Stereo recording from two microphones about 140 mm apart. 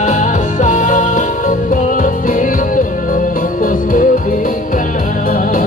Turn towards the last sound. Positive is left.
turn(degrees=90)